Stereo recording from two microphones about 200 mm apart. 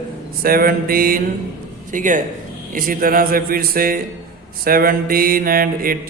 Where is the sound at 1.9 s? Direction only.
40° right (ahead or behind).